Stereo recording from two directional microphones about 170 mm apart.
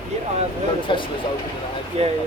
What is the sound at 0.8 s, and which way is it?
Speech, 30° left (ahead or behind).